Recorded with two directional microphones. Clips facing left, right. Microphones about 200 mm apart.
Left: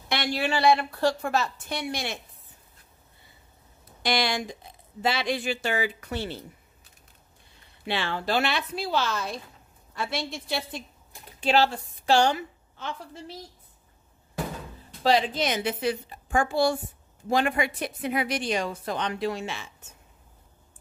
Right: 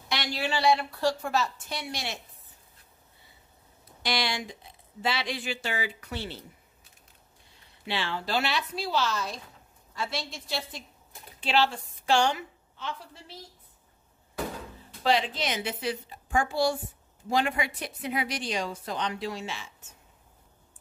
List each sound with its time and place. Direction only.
0.1 s a woman's voice: 55° left (ahead or behind)
4.0 s a woman's voice: 50° left (ahead or behind)
7.8 s a woman's voice: 55° left (ahead or behind)
11.4 s a woman's voice: 40° left (ahead or behind)
15.0 s a woman's voice: 40° left (ahead or behind); by 19.6 s 55° left (ahead or behind)